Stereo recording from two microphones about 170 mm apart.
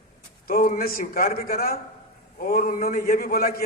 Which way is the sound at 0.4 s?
55° left (ahead or behind).